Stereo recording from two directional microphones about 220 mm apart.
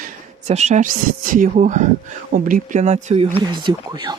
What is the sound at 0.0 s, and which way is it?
Speech, 30° right (ahead or behind).